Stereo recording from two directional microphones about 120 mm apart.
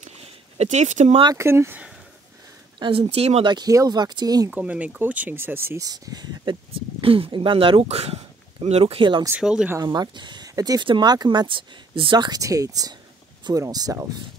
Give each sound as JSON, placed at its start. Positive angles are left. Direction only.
{"t": 0.0, "sound": "a sound", "side_deg": -65}
{"t": 1.3, "sound": "speech", "side_deg": -25}
{"t": 2.8, "sound": "speech", "side_deg": -50}
{"t": 3.4, "sound": "speech", "side_deg": -35}
{"t": 4.5, "sound": "speech", "side_deg": -10}
{"t": 5.9, "sound": "speech", "side_deg": -35}
{"t": 7.0, "sound": "speech", "side_deg": -50}
{"t": 9.4, "sound": "speech", "side_deg": -5}
{"t": 9.8, "sound": "speech", "side_deg": -40}